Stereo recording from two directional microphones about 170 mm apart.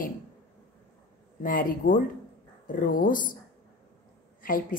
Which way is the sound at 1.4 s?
55° left (ahead or behind).